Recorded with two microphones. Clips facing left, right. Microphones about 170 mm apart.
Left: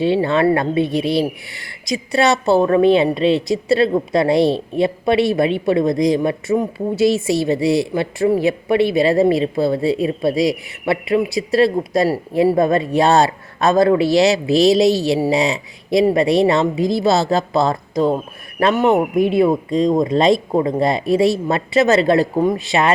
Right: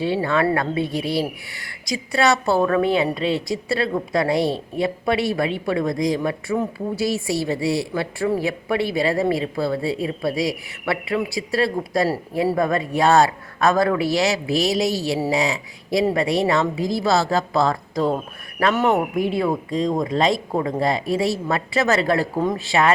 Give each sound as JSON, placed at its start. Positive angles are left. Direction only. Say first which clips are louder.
{"t": 0.0, "sound": "speech", "louder": "left 5 dB", "side_deg": 25}